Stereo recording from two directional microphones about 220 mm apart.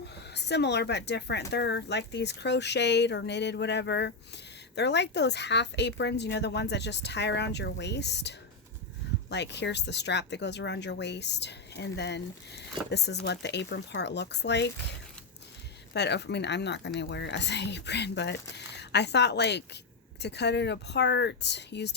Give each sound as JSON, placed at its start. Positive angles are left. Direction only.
{"t": 0.3, "sound": "speech", "side_deg": 50}
{"t": 15.9, "sound": "speech", "side_deg": 50}